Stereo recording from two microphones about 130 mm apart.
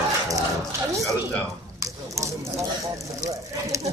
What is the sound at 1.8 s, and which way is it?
Speech, 25° right (ahead or behind).